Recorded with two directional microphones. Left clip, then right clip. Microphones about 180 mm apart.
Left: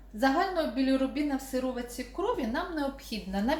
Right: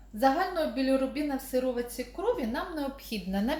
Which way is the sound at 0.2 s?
45° right (ahead or behind).